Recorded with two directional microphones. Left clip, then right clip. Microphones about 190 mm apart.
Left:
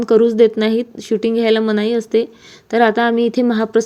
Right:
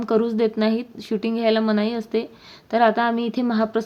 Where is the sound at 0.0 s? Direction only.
25° left (ahead or behind).